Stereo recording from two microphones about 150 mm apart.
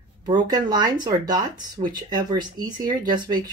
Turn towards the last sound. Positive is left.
turn(degrees=-30)  # may be behind; listen again after turning